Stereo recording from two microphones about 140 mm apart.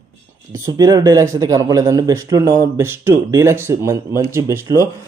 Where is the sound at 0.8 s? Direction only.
25° right (ahead or behind).